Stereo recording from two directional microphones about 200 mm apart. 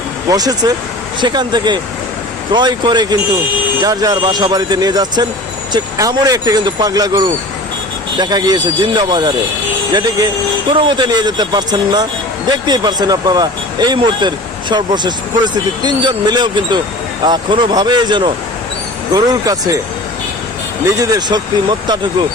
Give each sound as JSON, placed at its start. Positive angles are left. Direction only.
{"t": 0.3, "sound": "speech", "side_deg": -20}
{"t": 20.9, "sound": "speech", "side_deg": -15}